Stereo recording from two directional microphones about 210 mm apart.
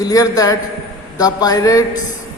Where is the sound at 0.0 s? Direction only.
15° left (ahead or behind).